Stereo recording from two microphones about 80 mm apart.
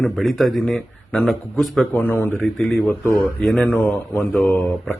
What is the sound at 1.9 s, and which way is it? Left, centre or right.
Speech, left.